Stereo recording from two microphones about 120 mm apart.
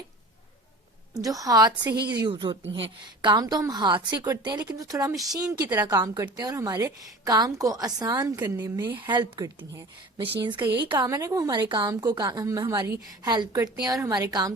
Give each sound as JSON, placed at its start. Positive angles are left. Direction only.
{"t": 1.2, "sound": "a woman's voice", "side_deg": -30}
{"t": 8.4, "sound": "speech", "side_deg": -20}
{"t": 9.0, "sound": "a woman's voice", "side_deg": -40}